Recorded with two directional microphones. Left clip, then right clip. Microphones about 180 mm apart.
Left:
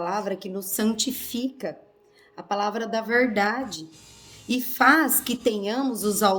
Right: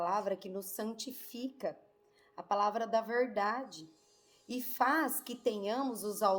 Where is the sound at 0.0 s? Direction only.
15° left (ahead or behind).